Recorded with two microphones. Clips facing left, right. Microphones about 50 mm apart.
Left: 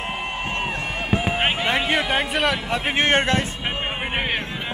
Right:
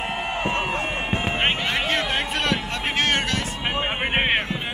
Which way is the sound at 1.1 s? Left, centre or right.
Right.